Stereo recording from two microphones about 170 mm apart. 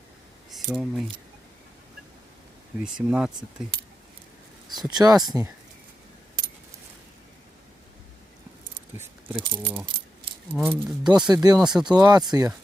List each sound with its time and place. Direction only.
0.5 s speech: centre (ahead or behind)
2.8 s speech: 5° right (ahead or behind)
4.7 s speech: 25° right (ahead or behind)
9.0 s keys jangling: 30° right (ahead or behind)
10.5 s speech: 10° right (ahead or behind)
11.3 s speech: 20° right (ahead or behind)
11.6 s speech: 5° right (ahead or behind)
11.9 s speech: 25° right (ahead or behind)